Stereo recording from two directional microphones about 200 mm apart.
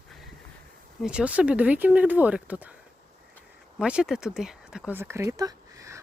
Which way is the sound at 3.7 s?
5° right (ahead or behind).